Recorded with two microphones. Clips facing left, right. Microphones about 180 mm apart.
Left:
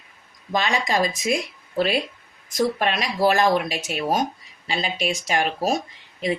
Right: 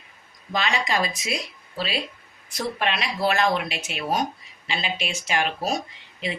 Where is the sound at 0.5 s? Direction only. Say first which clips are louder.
Left 3 dB; 45° left (ahead or behind).